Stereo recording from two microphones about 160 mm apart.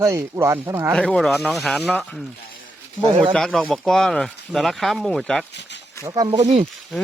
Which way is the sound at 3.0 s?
35° right (ahead or behind).